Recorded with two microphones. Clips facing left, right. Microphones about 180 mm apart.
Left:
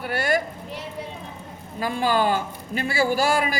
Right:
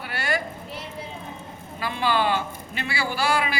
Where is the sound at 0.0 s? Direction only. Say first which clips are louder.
Left 5 dB; 45° left (ahead or behind).